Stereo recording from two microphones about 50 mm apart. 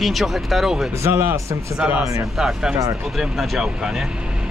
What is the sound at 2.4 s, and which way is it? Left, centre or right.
Speech, centre.